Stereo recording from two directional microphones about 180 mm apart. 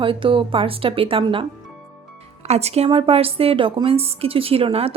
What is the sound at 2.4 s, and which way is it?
A woman's voice, 35° right (ahead or behind).